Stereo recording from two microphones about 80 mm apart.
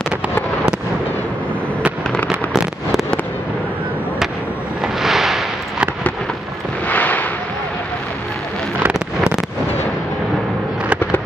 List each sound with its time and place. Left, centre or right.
2.2 s fireworks: centre
4.8 s fireworks: centre
6.9 s fireworks: left